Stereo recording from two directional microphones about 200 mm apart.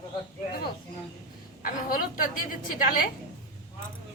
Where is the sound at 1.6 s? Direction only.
45° left (ahead or behind).